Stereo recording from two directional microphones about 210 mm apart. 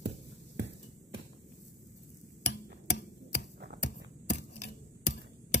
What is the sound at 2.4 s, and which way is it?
Tick-tock, 55° left (ahead or behind).